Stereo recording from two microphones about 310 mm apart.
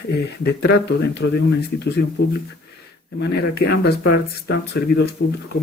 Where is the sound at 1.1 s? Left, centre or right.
Left.